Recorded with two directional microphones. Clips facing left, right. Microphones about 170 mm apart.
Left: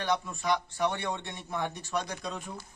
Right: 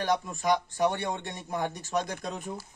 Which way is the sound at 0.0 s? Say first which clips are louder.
Right 3 dB; 40° right (ahead or behind).